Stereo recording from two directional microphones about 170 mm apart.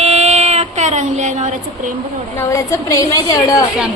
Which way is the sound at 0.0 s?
40° right (ahead or behind).